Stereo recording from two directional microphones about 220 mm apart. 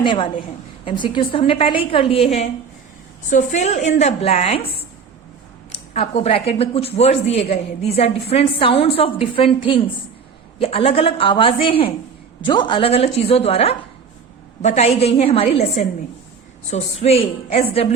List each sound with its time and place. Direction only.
0.0 s a woman's voice: 20° left (ahead or behind)
5.7 s speech: 30° left (ahead or behind)